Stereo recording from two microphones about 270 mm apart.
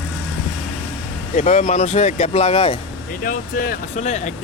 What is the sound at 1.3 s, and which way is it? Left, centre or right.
Speech, left.